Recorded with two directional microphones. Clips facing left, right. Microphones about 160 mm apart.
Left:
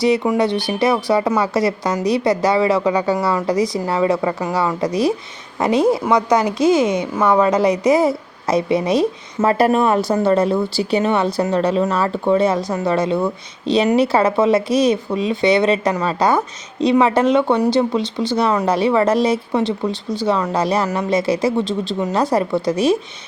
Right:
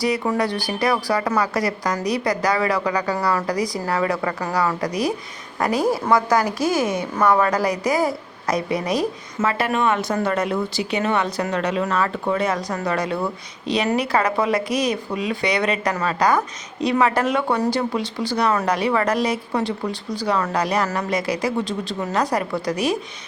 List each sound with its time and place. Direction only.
0.0 s speech: 20° left (ahead or behind)
9.4 s speech: 40° left (ahead or behind)